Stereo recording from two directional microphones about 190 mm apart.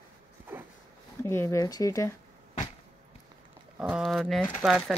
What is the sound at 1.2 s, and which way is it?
Speech, 10° left (ahead or behind).